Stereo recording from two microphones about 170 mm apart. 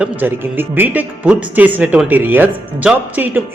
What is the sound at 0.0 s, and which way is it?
Speech, 10° right (ahead or behind).